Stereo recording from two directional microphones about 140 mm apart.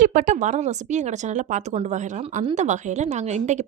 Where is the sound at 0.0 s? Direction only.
65° right (ahead or behind).